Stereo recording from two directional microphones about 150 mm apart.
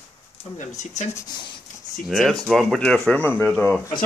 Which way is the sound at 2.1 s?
5° left (ahead or behind).